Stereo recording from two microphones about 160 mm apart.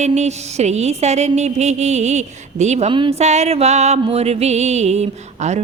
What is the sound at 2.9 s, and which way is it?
A woman's voice, 35° right (ahead or behind).